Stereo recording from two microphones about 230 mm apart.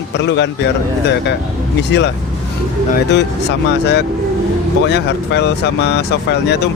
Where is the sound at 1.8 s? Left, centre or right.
Left.